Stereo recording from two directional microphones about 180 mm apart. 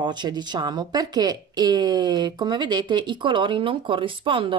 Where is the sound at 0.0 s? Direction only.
25° right (ahead or behind).